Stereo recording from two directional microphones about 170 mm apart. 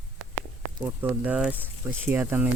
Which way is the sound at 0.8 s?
10° right (ahead or behind).